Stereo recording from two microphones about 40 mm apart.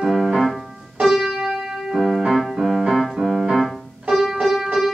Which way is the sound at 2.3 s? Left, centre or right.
Centre.